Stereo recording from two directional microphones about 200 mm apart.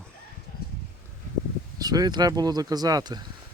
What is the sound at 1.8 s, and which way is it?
Speech, 20° right (ahead or behind).